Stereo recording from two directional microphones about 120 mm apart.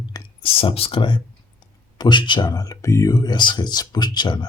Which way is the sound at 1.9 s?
40° left (ahead or behind).